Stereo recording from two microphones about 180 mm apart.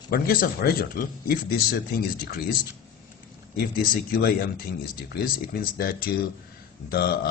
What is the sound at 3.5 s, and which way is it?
Speech, 60° left (ahead or behind).